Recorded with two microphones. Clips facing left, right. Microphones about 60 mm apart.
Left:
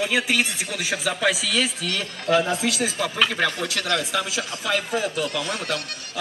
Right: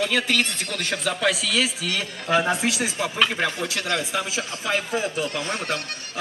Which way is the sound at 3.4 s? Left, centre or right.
Centre.